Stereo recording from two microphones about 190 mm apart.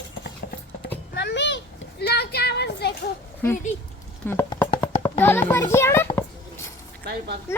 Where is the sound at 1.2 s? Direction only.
65° left (ahead or behind).